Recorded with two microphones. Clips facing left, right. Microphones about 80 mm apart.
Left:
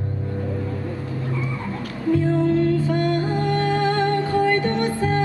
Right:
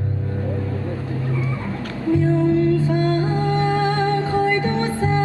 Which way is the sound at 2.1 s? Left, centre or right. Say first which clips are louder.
Right 2 dB; right.